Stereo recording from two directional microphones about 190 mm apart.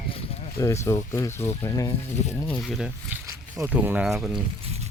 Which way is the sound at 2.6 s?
Centre (ahead or behind).